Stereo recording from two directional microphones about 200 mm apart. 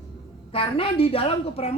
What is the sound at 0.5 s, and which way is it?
A woman's voice, 25° left (ahead or behind).